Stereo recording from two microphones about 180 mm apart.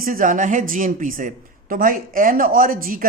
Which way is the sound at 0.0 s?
50° right (ahead or behind).